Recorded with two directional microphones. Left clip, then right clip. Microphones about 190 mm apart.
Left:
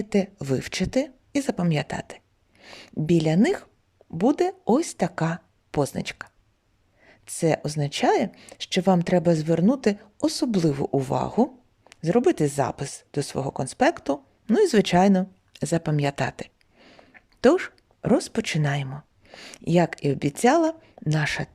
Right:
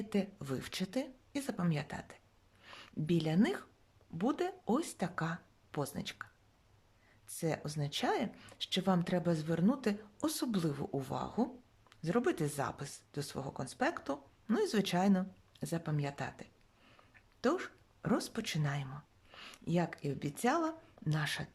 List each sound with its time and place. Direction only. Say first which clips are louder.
0.0 s speech: left 13 dB; 35° left (ahead or behind)
7.3 s a woman's voice: left 15 dB; 40° left (ahead or behind)